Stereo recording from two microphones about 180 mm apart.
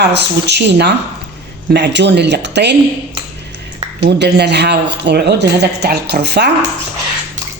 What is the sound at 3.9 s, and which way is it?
Speech, 65° right (ahead or behind).